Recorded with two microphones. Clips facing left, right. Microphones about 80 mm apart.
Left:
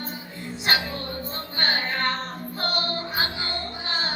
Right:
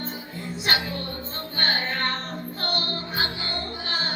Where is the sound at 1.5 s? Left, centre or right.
Left.